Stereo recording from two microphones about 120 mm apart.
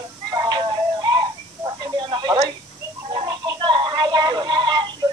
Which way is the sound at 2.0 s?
40° right (ahead or behind).